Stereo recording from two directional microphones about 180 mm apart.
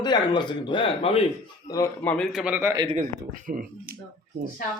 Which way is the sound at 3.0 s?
45° right (ahead or behind).